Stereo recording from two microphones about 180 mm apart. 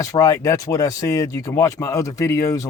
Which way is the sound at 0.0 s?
20° left (ahead or behind).